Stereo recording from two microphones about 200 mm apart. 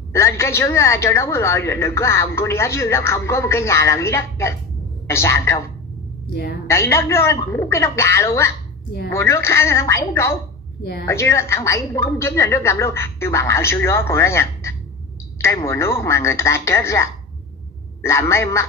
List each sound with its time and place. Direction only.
0.1 s a woman's voice: 15° left (ahead or behind)
6.7 s a woman's voice: 15° left (ahead or behind)
10.8 s a woman's voice: 55° left (ahead or behind)
11.1 s a woman's voice: 15° left (ahead or behind)